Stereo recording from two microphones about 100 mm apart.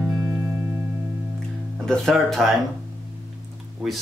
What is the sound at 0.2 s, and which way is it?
Music, 25° right (ahead or behind).